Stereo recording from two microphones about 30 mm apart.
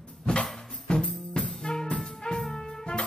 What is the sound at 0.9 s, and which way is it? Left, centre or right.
Music, left.